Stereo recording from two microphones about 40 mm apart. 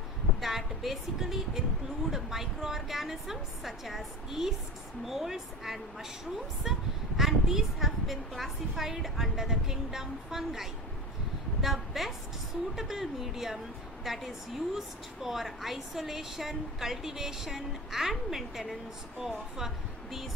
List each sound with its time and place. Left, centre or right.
0.4 s a woman's voice: centre